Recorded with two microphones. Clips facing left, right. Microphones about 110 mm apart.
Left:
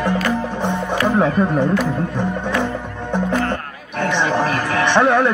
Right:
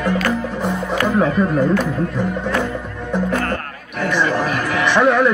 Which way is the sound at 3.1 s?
25° left (ahead or behind).